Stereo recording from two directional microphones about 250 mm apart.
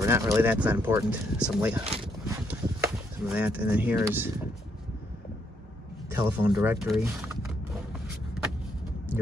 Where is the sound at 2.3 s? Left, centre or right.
Centre.